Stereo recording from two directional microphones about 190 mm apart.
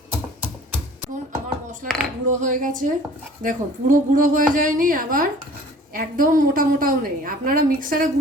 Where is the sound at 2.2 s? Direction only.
40° right (ahead or behind).